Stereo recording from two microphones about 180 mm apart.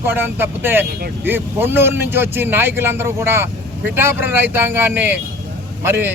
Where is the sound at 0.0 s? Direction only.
10° right (ahead or behind).